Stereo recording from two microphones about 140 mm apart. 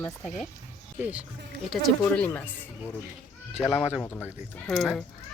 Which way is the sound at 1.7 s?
10° left (ahead or behind).